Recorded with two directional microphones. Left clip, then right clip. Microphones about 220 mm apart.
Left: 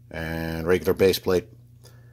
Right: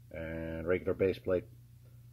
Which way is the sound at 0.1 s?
30° left (ahead or behind).